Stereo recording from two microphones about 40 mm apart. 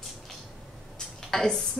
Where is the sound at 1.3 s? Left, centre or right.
Centre.